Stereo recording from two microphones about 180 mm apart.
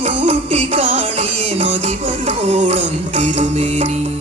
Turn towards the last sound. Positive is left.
turn(degrees=-40)  # may be behind; listen again after turning